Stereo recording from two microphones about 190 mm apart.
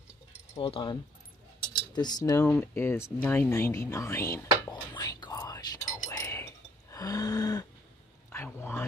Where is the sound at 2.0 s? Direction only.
20° left (ahead or behind).